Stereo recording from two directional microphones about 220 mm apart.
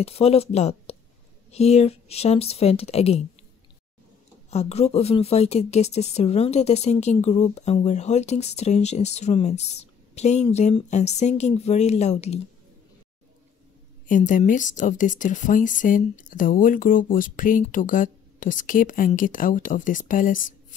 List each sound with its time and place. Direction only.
0.0 s a woman's voice: 25° left (ahead or behind)
4.5 s a woman's voice: 30° left (ahead or behind)
14.0 s speech: 35° left (ahead or behind)